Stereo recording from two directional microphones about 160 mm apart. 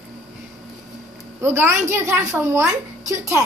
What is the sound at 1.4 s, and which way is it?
A woman's voice, 15° right (ahead or behind).